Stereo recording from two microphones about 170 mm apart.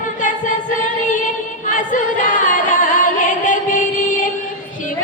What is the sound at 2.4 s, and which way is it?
Singing, 50° left (ahead or behind).